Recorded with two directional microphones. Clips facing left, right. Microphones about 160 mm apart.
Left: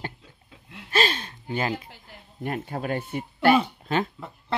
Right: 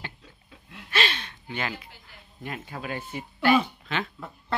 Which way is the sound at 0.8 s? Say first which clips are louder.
Left 4 dB; 40° left (ahead or behind).